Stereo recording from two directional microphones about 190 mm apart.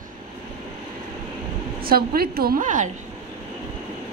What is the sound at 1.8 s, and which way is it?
A woman's voice, 50° right (ahead or behind).